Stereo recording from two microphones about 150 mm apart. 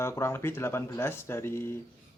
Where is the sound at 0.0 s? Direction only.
15° left (ahead or behind).